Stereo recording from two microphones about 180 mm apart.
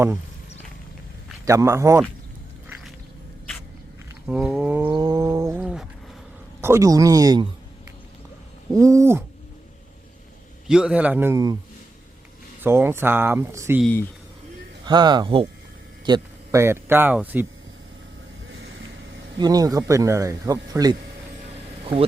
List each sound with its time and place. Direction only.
1.5 s speech: 15° right (ahead or behind)
4.3 s speech: 5° right (ahead or behind)
4.9 s a sound: 25° right (ahead or behind)
6.6 s speech: 15° right (ahead or behind)
8.7 s speech: 15° right (ahead or behind)
10.7 s speech: 5° right (ahead or behind)
12.6 s speech: 15° right (ahead or behind)
14.8 s speech: 25° right (ahead or behind)
19.4 s speech: 20° right (ahead or behind)